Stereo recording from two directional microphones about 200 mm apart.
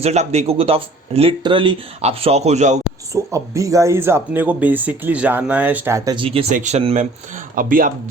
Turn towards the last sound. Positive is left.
turn(degrees=-45)  # may be behind; listen again after turning